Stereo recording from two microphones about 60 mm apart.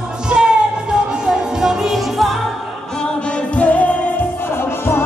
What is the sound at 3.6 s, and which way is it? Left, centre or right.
Music, left.